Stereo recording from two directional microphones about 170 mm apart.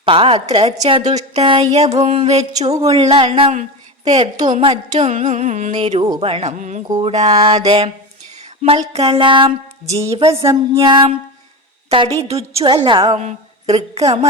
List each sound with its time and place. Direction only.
0.0 s a woman's voice: 35° right (ahead or behind)
4.1 s music: 40° right (ahead or behind)
6.1 s a woman's voice: 35° right (ahead or behind)
6.6 s music: 45° right (ahead or behind)
7.0 s a woman's voice: 40° right (ahead or behind)
13.1 s a woman's voice: 40° right (ahead or behind)